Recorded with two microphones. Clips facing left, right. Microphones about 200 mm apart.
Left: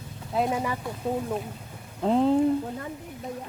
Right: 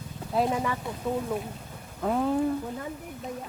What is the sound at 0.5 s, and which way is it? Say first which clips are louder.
Speech: even; 20° left (ahead or behind).